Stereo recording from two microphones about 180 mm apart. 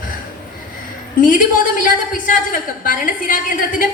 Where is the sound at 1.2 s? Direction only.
50° left (ahead or behind).